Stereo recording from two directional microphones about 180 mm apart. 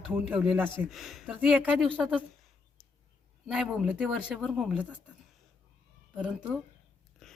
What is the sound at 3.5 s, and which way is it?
A woman's voice, 5° right (ahead or behind).